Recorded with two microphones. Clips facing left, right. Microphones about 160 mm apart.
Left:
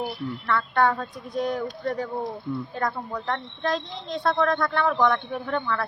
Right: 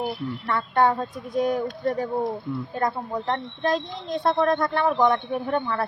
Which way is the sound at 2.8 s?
20° right (ahead or behind).